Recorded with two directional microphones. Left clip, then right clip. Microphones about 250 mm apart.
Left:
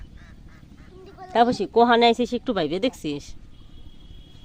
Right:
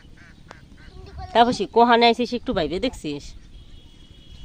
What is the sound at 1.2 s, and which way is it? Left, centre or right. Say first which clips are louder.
Speech: right 2 dB; centre.